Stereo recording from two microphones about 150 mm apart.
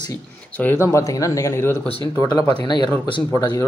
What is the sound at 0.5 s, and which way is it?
Speech, 15° left (ahead or behind).